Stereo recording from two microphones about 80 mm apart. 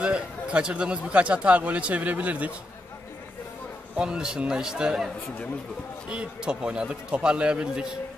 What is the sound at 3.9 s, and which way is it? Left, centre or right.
A man's voice, centre.